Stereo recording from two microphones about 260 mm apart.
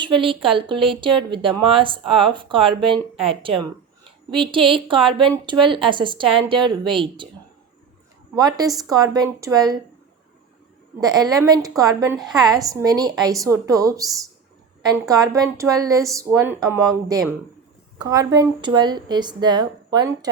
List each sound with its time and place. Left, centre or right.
0.0 s a woman's voice: centre
8.4 s a woman's voice: centre
11.0 s a woman's voice: centre